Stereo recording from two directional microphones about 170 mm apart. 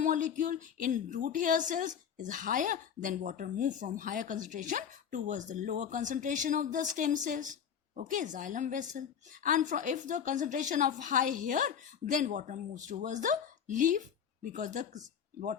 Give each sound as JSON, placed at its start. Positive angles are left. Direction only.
{"t": 0.0, "sound": "a woman's voice", "side_deg": -50}